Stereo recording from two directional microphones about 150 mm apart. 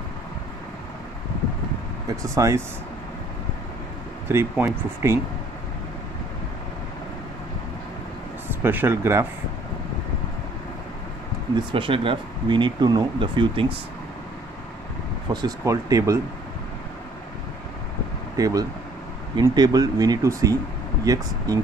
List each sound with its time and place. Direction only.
2.2 s speech: 20° right (ahead or behind)
4.3 s speech: 15° right (ahead or behind)
8.5 s speech: 15° right (ahead or behind)
11.5 s speech: 35° right (ahead or behind)
15.3 s speech: 20° right (ahead or behind)
18.3 s speech: 25° right (ahead or behind)